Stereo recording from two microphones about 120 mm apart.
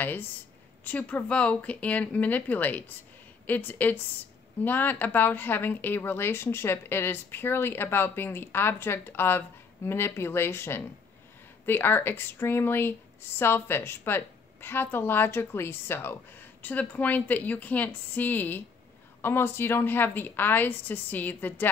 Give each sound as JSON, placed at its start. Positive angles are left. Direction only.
{"t": 0.0, "sound": "a woman's voice", "side_deg": 15}